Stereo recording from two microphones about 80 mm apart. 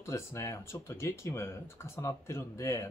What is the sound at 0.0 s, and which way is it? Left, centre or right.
Speech, left.